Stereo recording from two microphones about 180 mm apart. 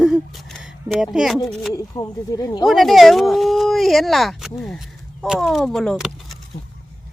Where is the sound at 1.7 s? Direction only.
20° left (ahead or behind).